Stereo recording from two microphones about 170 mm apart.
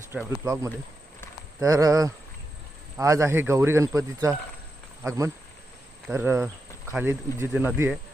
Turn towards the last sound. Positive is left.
turn(degrees=-10)  # may be behind; listen again after turning